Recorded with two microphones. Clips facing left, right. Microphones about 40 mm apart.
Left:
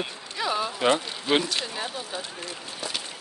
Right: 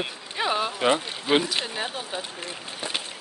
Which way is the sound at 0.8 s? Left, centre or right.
Centre.